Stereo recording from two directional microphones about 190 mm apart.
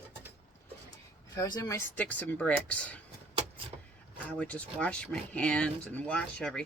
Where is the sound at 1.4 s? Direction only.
20° left (ahead or behind).